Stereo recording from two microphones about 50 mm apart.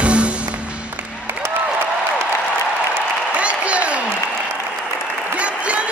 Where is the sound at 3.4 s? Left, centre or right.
Right.